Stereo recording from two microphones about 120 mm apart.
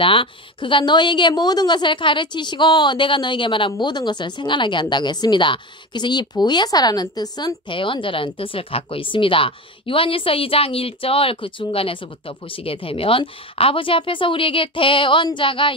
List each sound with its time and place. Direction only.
0.0 s a woman's voice: 45° left (ahead or behind)